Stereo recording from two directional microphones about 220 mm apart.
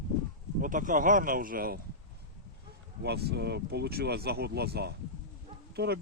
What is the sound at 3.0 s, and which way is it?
Speech, 45° right (ahead or behind).